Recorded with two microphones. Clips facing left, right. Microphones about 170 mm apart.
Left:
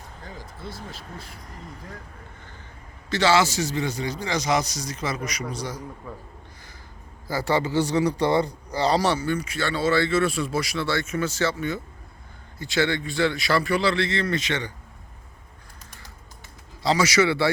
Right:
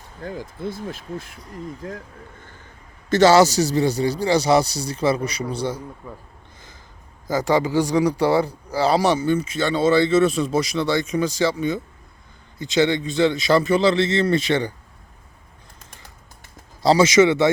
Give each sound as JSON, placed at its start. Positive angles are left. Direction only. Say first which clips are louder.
{"t": 0.2, "sound": "speech", "louder": "right 11 dB", "side_deg": -50}
{"t": 1.8, "sound": "speech", "louder": "right 9 dB", "side_deg": -70}
{"t": 3.1, "sound": "a man's voice", "louder": "right 7 dB", "side_deg": -45}
{"t": 7.3, "sound": "a man's voice", "louder": "right 4 dB", "side_deg": -15}
{"t": 16.8, "sound": "speech", "louder": "right 6 dB", "side_deg": -35}
{"t": 17.1, "sound": "a man's voice", "louder": "right 6 dB", "side_deg": -20}